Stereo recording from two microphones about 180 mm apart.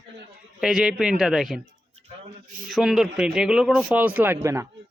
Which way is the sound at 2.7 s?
Centre (ahead or behind).